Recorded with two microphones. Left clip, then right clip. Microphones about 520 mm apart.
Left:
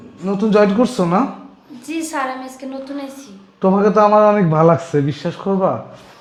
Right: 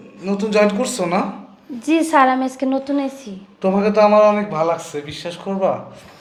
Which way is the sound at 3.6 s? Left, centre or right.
Left.